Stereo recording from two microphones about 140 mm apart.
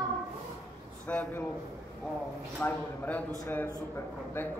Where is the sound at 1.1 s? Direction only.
10° left (ahead or behind).